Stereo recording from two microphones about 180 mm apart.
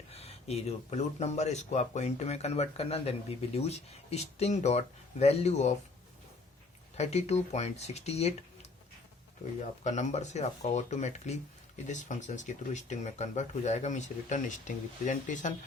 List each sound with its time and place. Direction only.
0.1 s speech: 35° left (ahead or behind)
6.9 s speech: 40° left (ahead or behind)
9.8 s speech: 40° left (ahead or behind)